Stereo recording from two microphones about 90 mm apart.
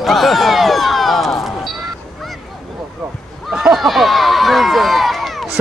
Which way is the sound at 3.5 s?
5° right (ahead or behind).